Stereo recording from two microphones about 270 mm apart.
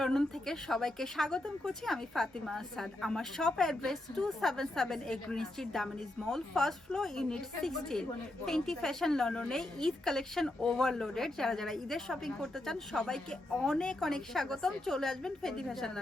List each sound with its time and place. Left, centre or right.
0.0 s a woman's voice: centre